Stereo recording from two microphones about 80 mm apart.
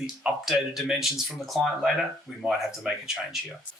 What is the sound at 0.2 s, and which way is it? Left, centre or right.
Speech, centre.